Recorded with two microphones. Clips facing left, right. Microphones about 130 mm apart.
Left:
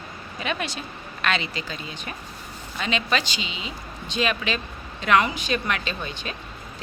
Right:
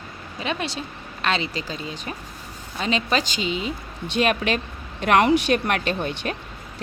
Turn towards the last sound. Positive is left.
turn(degrees=-60)  # may be behind; listen again after turning